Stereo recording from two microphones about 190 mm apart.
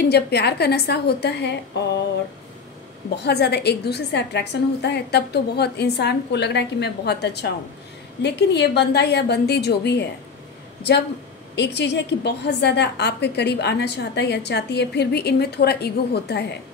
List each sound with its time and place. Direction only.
0.0 s a woman's voice: 60° left (ahead or behind)
3.3 s a woman's voice: 60° left (ahead or behind)